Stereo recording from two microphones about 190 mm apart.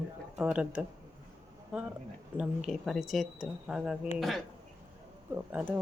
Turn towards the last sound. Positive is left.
turn(degrees=-10)  # may be behind; listen again after turning